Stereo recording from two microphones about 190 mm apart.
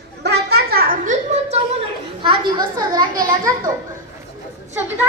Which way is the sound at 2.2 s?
25° right (ahead or behind).